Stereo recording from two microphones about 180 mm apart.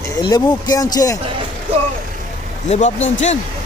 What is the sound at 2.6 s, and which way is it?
Speech, 40° left (ahead or behind).